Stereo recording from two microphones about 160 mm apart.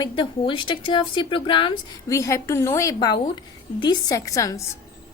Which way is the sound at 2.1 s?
20° left (ahead or behind).